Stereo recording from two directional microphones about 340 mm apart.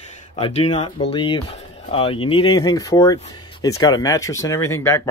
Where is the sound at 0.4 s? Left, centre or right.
Centre.